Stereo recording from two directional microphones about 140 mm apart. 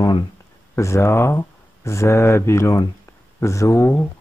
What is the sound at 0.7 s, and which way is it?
Speech, 20° left (ahead or behind).